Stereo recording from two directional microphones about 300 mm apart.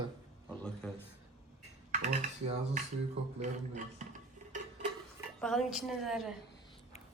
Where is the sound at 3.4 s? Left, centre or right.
Right.